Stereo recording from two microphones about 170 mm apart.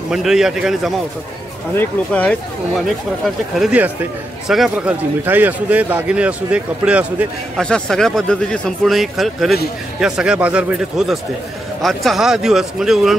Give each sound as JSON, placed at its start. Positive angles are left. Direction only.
{"t": 0.1, "sound": "speech", "side_deg": -5}
{"t": 1.8, "sound": "speech", "side_deg": 10}
{"t": 3.5, "sound": "speech", "side_deg": -5}
{"t": 7.6, "sound": "speech", "side_deg": 5}